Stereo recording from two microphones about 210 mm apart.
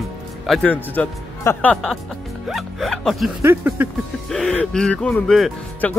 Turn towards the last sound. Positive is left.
turn(degrees=0)  # may be behind; listen again after turning